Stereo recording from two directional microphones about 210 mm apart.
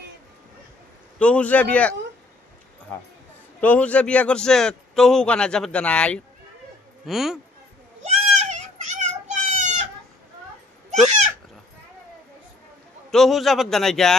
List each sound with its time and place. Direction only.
1.2 s a man's voice: 5° left (ahead or behind)
3.6 s a man's voice: 5° left (ahead or behind)
8.0 s children playing: 35° right (ahead or behind)
11.1 s a sound: 35° right (ahead or behind)
13.1 s a man's voice: centre (ahead or behind)